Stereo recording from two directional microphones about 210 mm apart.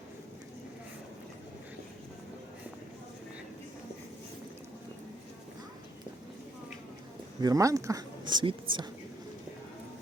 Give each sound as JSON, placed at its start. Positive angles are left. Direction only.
{"t": 7.4, "sound": "speech", "side_deg": -15}